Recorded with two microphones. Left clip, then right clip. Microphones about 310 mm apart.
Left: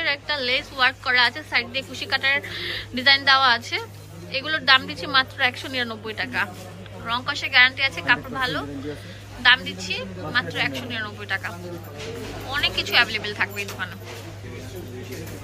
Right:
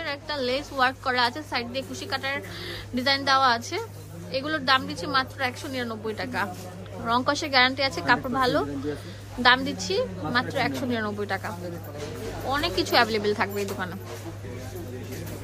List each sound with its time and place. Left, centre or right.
0.0 s a woman's voice: centre